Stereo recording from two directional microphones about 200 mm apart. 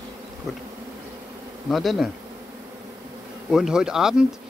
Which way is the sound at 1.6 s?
Centre (ahead or behind).